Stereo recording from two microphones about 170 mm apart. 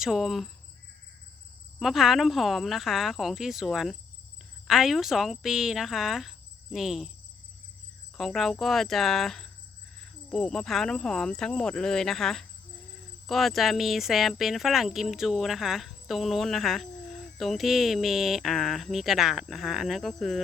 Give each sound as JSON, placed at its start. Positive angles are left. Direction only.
{"t": 0.0, "sound": "speech", "side_deg": 0}
{"t": 1.8, "sound": "speech", "side_deg": 0}
{"t": 8.1, "sound": "speech", "side_deg": 0}